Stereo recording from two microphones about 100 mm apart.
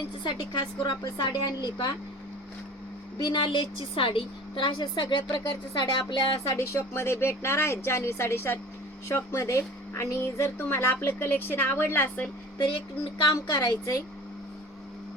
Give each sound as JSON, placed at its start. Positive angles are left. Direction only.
{"t": 0.3, "sound": "a woman's voice", "side_deg": 50}
{"t": 3.2, "sound": "a woman's voice", "side_deg": 50}
{"t": 6.5, "sound": "a woman's voice", "side_deg": 25}
{"t": 13.3, "sound": "a woman's voice", "side_deg": 40}